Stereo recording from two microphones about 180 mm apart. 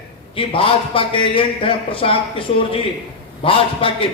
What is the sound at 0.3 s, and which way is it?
A man's voice, 30° left (ahead or behind).